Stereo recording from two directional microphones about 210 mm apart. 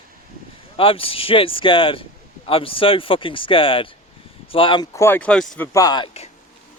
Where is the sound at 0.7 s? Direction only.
25° left (ahead or behind); by 5.7 s 5° left (ahead or behind).